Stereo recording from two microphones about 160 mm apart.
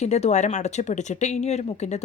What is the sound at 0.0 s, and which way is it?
Speech, 45° left (ahead or behind).